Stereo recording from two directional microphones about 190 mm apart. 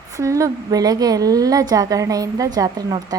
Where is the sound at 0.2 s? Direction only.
15° right (ahead or behind).